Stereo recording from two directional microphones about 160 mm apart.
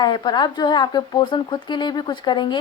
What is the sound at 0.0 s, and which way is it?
Speech, 25° left (ahead or behind).